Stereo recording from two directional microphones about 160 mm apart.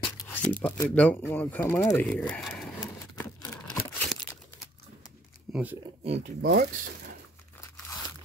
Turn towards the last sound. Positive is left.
turn(degrees=-60)  # may be behind; listen again after turning